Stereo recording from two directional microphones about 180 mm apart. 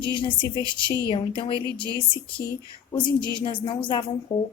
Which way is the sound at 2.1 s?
30° left (ahead or behind).